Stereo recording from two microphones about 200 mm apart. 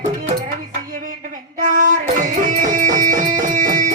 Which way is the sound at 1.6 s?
40° right (ahead or behind).